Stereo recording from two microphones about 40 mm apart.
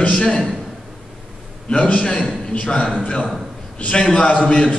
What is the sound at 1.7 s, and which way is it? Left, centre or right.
A man's voice, left.